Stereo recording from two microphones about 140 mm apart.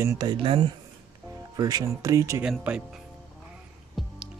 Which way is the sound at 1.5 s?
25° right (ahead or behind).